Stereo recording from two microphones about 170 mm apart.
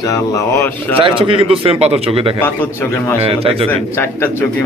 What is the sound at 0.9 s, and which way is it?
Speech, 30° right (ahead or behind).